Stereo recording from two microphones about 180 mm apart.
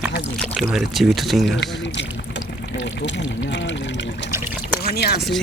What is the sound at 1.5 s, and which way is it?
Speech, 75° left (ahead or behind).